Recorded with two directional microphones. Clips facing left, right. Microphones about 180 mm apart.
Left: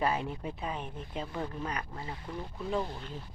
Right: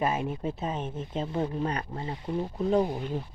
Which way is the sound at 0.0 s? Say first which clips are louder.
Right 3 dB; 20° right (ahead or behind).